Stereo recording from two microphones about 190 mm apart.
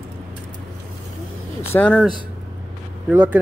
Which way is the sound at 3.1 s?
10° right (ahead or behind).